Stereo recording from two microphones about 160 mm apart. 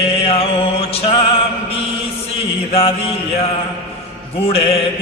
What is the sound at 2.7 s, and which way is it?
Mantra, 35° left (ahead or behind).